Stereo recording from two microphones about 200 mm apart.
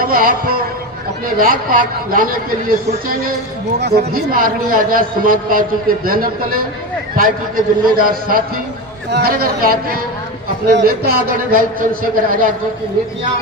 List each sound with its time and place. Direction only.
0.1 s a man's voice: 45° right (ahead or behind)